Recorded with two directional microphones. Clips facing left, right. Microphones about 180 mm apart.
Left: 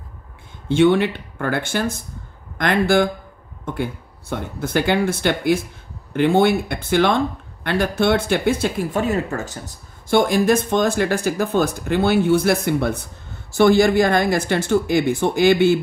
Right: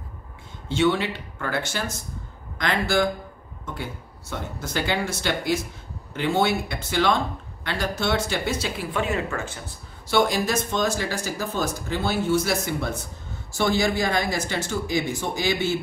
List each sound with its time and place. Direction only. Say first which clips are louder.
0.7 s speech: left 7 dB; 55° left (ahead or behind); by 9.6 s 40° left (ahead or behind)
10.0 s speech: left 6 dB; 50° left (ahead or behind)